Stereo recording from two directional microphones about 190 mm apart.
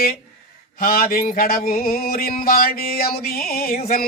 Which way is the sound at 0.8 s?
50° left (ahead or behind).